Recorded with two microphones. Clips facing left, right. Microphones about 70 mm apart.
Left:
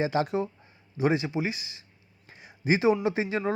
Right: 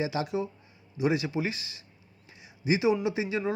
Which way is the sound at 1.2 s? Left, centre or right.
Left.